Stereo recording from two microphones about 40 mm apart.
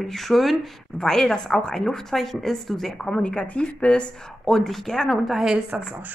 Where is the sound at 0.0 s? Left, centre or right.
Centre.